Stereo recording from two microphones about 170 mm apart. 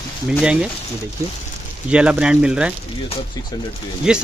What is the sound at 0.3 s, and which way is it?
Speech, 5° right (ahead or behind).